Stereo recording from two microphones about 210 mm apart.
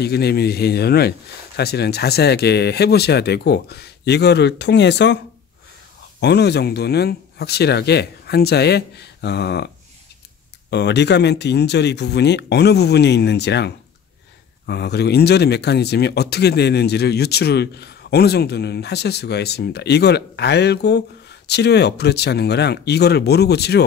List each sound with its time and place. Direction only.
0.0 s speech: 50° left (ahead or behind)
10.7 s speech: 55° left (ahead or behind)